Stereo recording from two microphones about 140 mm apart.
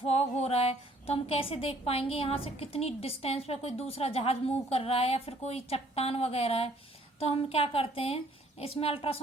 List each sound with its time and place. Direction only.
0.0 s speech: 50° left (ahead or behind)